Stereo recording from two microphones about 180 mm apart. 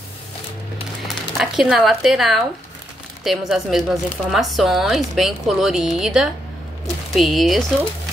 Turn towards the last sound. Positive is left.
turn(degrees=0)  # may be behind; listen again after turning